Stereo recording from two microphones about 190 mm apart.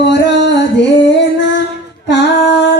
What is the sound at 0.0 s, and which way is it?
Music, 65° left (ahead or behind).